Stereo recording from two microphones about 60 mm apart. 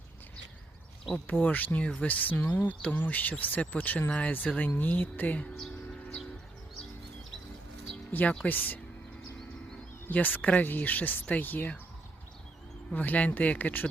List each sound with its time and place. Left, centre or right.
1.1 s speech: left
8.4 s speech: left
10.1 s speech: left
12.9 s speech: left